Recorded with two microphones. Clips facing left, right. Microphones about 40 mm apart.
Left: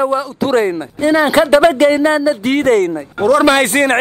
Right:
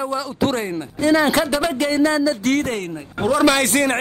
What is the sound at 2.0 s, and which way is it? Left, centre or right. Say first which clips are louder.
Speech: left 4 dB; left.